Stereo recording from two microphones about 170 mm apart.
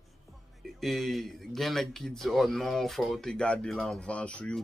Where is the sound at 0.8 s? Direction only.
Centre (ahead or behind).